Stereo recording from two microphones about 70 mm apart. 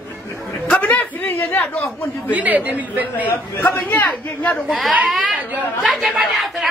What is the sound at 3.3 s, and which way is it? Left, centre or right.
A woman's voice, left.